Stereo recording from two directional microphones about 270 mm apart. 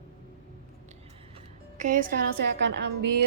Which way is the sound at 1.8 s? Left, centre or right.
Right.